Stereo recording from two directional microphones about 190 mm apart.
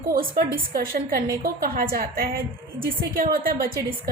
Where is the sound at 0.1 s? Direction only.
50° right (ahead or behind).